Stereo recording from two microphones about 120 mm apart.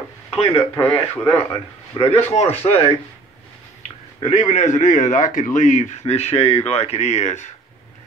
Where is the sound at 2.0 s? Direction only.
35° left (ahead or behind).